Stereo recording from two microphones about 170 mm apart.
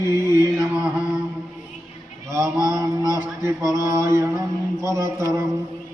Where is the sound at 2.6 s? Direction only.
15° right (ahead or behind).